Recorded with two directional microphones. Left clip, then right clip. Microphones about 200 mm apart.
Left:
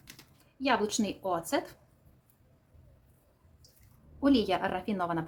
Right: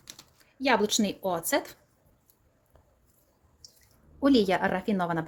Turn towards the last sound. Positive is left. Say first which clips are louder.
# right 3 dB
turn(degrees=-25)  # may be behind; listen again after turning